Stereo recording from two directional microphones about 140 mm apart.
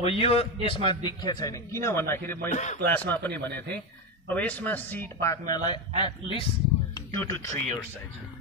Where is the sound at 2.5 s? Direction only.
55° left (ahead or behind).